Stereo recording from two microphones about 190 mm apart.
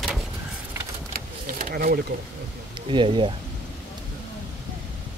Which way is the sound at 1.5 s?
50° right (ahead or behind).